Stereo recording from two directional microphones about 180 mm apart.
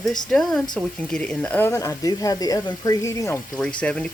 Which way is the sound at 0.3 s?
Centre (ahead or behind).